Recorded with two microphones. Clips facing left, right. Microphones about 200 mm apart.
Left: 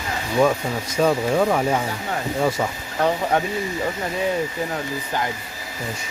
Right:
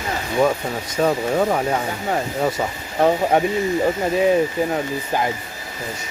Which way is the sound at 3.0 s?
20° right (ahead or behind).